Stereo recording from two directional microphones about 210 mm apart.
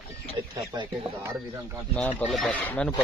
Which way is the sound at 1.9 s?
5° left (ahead or behind).